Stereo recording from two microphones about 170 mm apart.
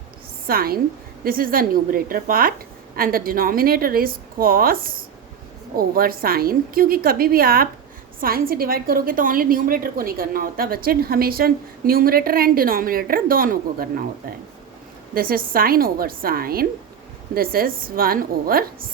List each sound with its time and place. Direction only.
0.4 s a woman's voice: 60° right (ahead or behind)
15.1 s a woman's voice: 60° right (ahead or behind)